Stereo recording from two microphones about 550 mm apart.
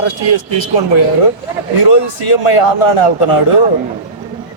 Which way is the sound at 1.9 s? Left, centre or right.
Left.